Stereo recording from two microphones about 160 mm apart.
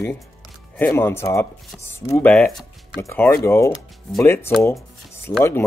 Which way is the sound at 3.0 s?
15° left (ahead or behind).